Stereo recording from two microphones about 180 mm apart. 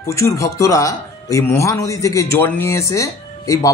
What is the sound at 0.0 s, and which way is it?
Speech, 15° left (ahead or behind).